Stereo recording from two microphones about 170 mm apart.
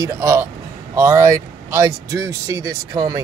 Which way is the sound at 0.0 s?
15° right (ahead or behind).